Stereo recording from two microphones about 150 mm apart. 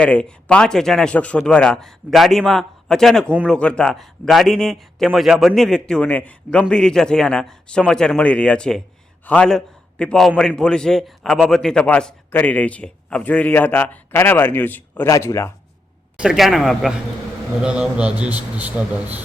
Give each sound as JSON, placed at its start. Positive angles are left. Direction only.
{"t": 0.0, "sound": "a man's voice", "side_deg": 5}
{"t": 16.1, "sound": "a man's voice", "side_deg": -5}